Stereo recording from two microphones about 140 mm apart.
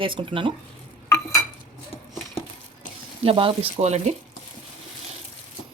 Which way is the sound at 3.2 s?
40° right (ahead or behind).